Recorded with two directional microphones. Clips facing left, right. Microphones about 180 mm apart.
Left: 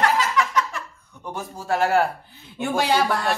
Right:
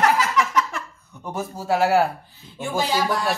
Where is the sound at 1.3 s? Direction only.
10° right (ahead or behind).